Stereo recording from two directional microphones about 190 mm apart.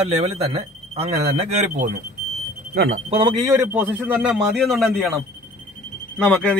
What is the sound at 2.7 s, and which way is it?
Speech, 55° right (ahead or behind).